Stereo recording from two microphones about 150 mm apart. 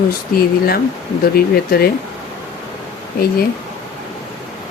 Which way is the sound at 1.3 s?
90° left.